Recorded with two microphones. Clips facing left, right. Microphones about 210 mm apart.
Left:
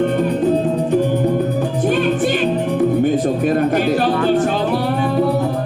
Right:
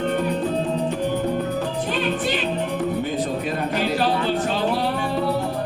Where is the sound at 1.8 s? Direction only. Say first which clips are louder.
Left 10 dB; 50° left (ahead or behind).